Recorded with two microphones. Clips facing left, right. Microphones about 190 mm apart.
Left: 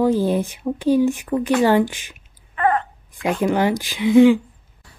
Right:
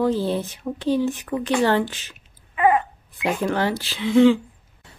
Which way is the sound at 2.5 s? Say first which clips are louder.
Right 1 dB; 10° right (ahead or behind).